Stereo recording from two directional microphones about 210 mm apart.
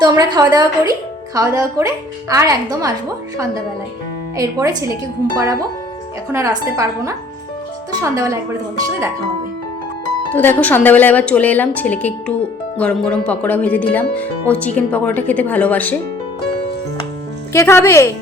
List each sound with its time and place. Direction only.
0.0 s a woman's voice: 20° right (ahead or behind)
4.4 s speech: 15° right (ahead or behind)
6.3 s speech: 15° right (ahead or behind)
10.3 s speech: 10° left (ahead or behind)
17.5 s speech: 10° left (ahead or behind)